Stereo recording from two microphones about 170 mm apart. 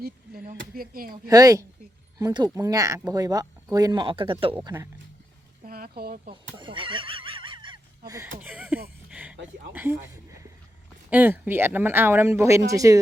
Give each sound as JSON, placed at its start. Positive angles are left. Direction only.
{"t": 0.0, "sound": "speech", "side_deg": -65}
{"t": 1.1, "sound": "speech", "side_deg": -20}
{"t": 5.6, "sound": "a sound", "side_deg": -60}
{"t": 6.0, "sound": "speech", "side_deg": -60}
{"t": 6.3, "sound": "neigh", "side_deg": -30}
{"t": 8.4, "sound": "speech", "side_deg": -10}
{"t": 9.0, "sound": "a sound", "side_deg": -5}
{"t": 11.1, "sound": "speech", "side_deg": -10}